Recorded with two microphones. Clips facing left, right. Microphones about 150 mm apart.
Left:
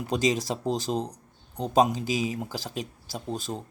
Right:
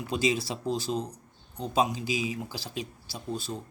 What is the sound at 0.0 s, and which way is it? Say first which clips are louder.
Speech: left 2 dB; 40° left (ahead or behind).